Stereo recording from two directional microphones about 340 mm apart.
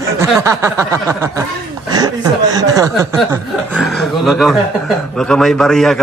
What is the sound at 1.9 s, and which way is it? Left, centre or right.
Chuckle, centre.